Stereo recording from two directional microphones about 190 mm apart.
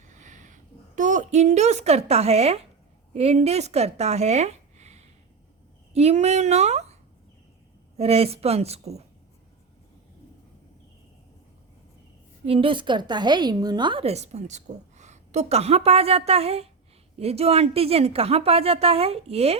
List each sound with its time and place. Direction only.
0.0 s a sound: 40° right (ahead or behind)
3.1 s a woman's voice: 35° right (ahead or behind)
7.9 s a woman's voice: 30° right (ahead or behind)
12.5 s a woman's voice: 30° right (ahead or behind)